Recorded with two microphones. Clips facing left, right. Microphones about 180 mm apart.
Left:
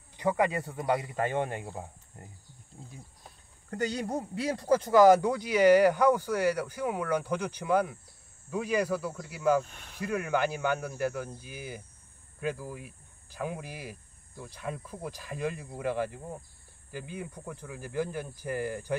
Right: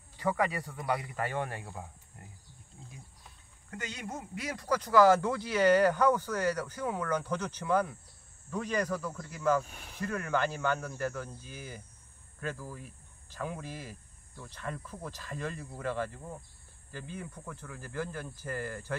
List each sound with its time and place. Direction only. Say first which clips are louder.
0.2 s speech: left 3 dB; 20° left (ahead or behind)
3.3 s speech: left 8 dB; 35° left (ahead or behind); by 9.7 s 10° left (ahead or behind)
9.7 s speech: right 1 dB; 5° right (ahead or behind)
9.9 s speech: left 3 dB; 15° left (ahead or behind)